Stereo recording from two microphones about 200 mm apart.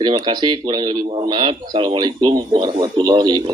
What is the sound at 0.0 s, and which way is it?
Speech, 20° right (ahead or behind).